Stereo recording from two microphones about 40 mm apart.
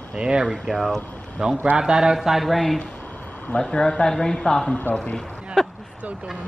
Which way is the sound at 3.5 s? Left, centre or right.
Left.